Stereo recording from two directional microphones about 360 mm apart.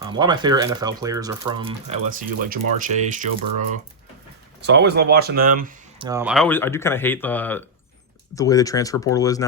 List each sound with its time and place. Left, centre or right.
0.1 s speech: centre
4.6 s speech: right
6.1 s speech: centre